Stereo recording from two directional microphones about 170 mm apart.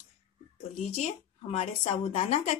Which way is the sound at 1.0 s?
40° left (ahead or behind).